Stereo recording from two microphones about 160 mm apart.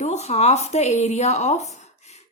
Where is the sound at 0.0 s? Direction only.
45° left (ahead or behind).